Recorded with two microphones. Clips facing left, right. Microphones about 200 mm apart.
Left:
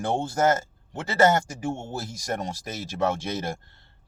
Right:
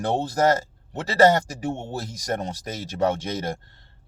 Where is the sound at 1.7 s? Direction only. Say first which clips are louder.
Right 1 dB; 65° right (ahead or behind).